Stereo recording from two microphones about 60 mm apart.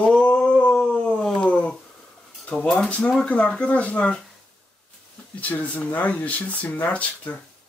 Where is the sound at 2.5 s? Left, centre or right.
Centre.